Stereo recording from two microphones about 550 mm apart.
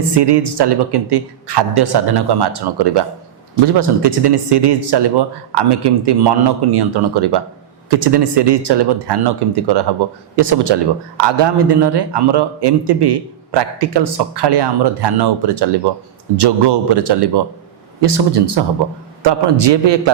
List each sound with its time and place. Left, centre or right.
0.2 s a man's voice: right